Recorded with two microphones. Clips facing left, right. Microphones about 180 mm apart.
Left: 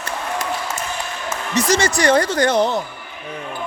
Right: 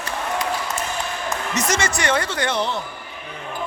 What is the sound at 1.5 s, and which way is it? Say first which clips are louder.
Speech: left 6 dB; 35° left (ahead or behind).